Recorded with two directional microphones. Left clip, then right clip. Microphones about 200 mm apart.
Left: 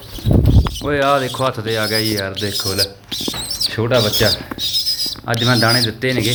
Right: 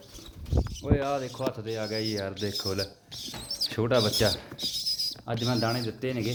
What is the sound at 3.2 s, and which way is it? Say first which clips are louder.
Speech: left 11 dB; 5° right (ahead or behind).